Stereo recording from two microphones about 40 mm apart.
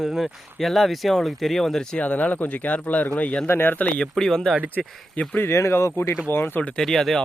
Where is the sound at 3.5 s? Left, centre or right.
Left.